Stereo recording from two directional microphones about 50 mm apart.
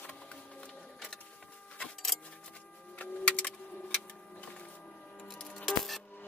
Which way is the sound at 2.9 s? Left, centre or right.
Left.